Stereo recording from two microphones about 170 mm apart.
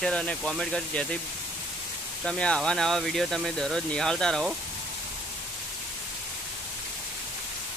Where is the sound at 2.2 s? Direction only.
5° left (ahead or behind).